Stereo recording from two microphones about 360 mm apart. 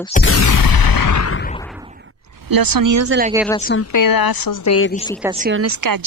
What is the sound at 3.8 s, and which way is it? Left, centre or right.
Speech, left.